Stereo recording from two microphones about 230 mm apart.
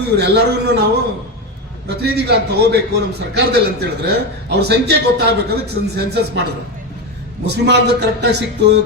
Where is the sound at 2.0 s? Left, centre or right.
Right.